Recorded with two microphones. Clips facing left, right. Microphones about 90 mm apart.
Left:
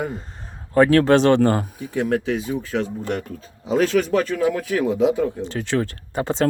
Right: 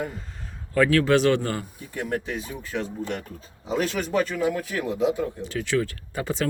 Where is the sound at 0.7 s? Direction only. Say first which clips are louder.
Left 5 dB; 35° left (ahead or behind).